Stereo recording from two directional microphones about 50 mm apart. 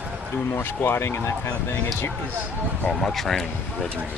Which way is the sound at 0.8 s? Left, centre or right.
Left.